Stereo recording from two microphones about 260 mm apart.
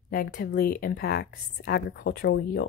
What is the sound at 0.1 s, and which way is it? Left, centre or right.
Speech, left.